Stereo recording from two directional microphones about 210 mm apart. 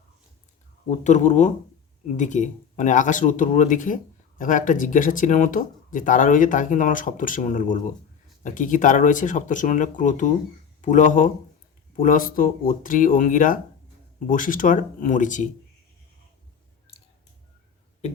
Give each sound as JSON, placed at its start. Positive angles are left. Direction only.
{"t": 0.9, "sound": "speech", "side_deg": 35}